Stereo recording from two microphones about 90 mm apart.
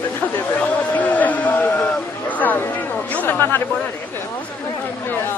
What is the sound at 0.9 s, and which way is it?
Speech, 20° left (ahead or behind).